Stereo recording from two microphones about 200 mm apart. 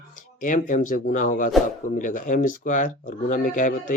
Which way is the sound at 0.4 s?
40° left (ahead or behind).